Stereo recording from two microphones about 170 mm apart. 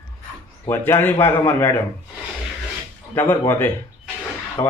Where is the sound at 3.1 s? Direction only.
15° left (ahead or behind).